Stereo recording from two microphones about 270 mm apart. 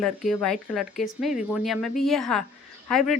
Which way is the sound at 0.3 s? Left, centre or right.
Centre.